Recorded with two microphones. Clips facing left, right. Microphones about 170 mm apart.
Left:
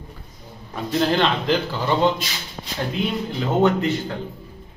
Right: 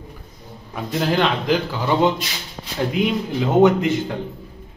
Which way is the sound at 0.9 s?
10° right (ahead or behind).